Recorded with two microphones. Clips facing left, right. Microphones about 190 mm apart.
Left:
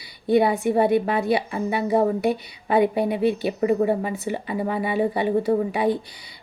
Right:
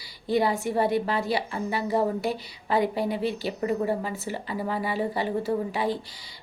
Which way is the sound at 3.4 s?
15° left (ahead or behind).